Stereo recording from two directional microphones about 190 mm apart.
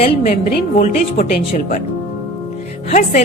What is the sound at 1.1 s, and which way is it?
Speech, 45° left (ahead or behind).